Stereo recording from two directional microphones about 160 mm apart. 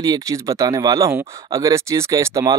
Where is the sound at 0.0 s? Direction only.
20° right (ahead or behind).